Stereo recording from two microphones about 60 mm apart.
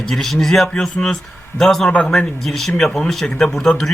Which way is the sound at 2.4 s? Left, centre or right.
Centre.